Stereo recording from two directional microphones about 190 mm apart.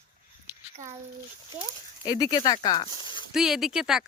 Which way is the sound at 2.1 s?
20° left (ahead or behind).